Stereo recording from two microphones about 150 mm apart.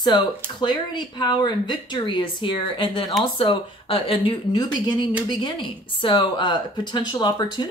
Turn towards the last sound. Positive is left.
turn(degrees=30)  # may be behind; listen again after turning